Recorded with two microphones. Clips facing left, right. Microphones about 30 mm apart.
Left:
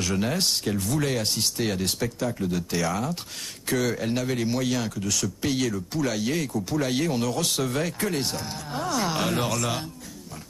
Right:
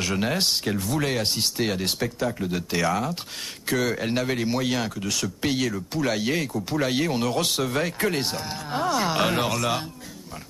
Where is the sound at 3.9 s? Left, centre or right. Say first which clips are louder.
Right 1 dB; right.